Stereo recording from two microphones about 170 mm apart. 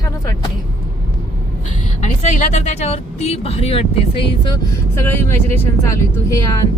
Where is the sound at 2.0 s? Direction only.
45° left (ahead or behind).